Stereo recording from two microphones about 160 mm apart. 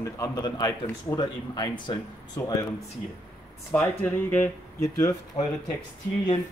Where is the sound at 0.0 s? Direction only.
25° left (ahead or behind).